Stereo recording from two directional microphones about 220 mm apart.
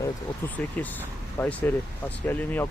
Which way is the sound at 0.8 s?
10° left (ahead or behind).